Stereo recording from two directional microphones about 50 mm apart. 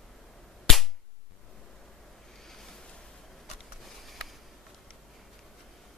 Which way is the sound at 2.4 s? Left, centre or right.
Centre.